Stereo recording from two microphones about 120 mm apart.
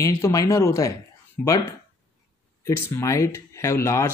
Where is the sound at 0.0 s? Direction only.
25° left (ahead or behind).